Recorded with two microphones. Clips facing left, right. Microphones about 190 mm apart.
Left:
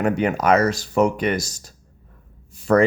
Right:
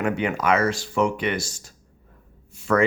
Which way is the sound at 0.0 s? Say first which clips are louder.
Left 4 dB; 40° left (ahead or behind).